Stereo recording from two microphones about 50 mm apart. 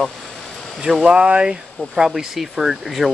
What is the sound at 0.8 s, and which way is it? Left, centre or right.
Speech, centre.